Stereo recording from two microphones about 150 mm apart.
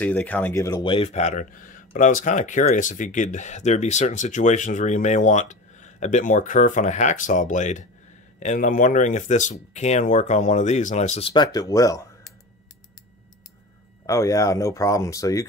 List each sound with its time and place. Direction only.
0.0 s speech: 10° left (ahead or behind)
0.8 s speech: 40° left (ahead or behind); by 12.1 s 20° left (ahead or behind)
14.0 s speech: 20° left (ahead or behind)